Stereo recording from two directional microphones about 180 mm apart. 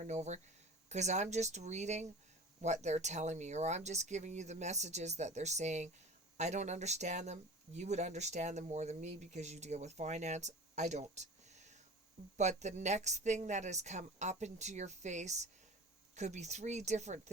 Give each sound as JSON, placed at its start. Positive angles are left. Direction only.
{"t": 0.0, "sound": "speech", "side_deg": -40}